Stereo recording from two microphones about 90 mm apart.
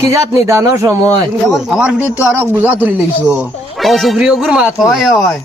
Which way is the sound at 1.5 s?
5° right (ahead or behind).